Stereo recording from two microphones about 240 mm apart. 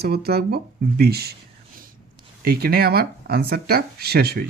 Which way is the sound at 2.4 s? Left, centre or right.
Right.